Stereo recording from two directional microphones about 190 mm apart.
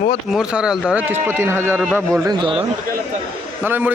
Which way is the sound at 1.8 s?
Centre (ahead or behind).